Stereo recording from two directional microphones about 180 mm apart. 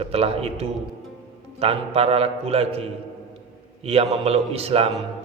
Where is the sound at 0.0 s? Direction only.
35° right (ahead or behind).